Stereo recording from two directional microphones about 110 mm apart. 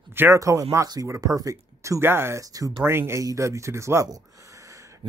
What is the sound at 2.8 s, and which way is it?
Speech, 20° right (ahead or behind).